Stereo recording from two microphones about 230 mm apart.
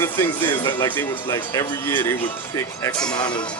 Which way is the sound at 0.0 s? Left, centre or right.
Centre.